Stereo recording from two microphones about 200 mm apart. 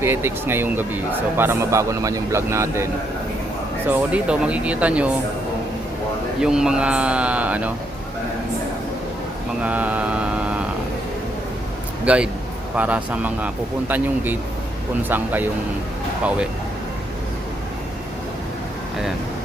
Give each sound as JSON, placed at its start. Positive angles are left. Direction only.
{"t": 0.0, "sound": "speech", "side_deg": -10}
{"t": 3.8, "sound": "speech", "side_deg": -5}
{"t": 6.4, "sound": "speech", "side_deg": -5}
{"t": 9.6, "sound": "speech", "side_deg": -5}
{"t": 12.0, "sound": "speech", "side_deg": -5}